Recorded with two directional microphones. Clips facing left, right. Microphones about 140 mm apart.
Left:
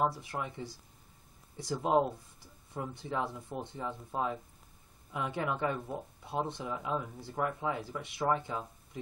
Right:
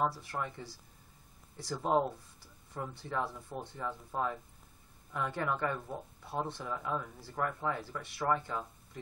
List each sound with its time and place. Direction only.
0.0 s speech: 15° left (ahead or behind)